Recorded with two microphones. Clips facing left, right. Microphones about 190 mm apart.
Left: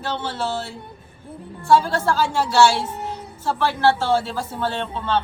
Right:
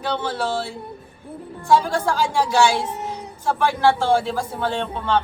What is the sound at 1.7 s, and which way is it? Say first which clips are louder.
Speech: left 1 dB; 15° right (ahead or behind).